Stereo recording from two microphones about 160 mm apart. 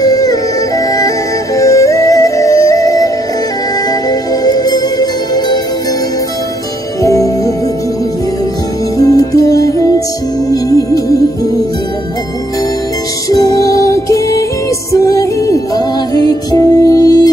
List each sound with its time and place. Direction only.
0.0 s music: 25° left (ahead or behind)
4.1 s music: 25° left (ahead or behind)
7.0 s music: 20° left (ahead or behind)
8.9 s music: 20° left (ahead or behind)
13.3 s music: 20° left (ahead or behind)
15.4 s music: 20° left (ahead or behind)